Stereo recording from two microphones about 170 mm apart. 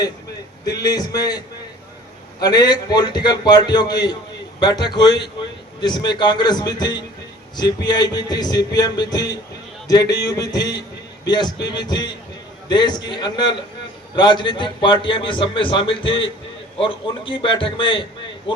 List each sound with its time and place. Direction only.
0.7 s a man's voice: 20° left (ahead or behind)
2.4 s a man's voice: 25° left (ahead or behind)